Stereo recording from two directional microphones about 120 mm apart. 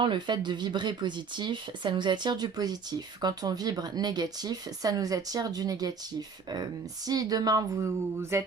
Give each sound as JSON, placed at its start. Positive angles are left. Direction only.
{"t": 0.0, "sound": "speech", "side_deg": -40}